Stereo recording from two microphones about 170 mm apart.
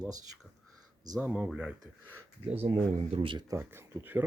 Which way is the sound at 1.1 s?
10° right (ahead or behind).